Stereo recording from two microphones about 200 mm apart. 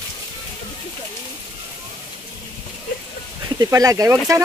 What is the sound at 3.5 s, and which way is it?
Speech, 15° right (ahead or behind).